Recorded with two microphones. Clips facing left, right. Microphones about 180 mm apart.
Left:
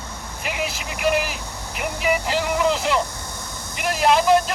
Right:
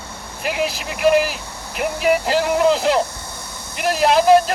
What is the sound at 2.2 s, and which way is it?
Speech, 40° right (ahead or behind).